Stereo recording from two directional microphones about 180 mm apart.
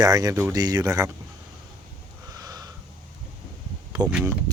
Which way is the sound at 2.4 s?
20° right (ahead or behind).